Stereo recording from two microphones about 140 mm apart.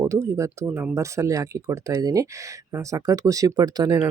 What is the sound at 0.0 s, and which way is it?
Speech, 20° right (ahead or behind).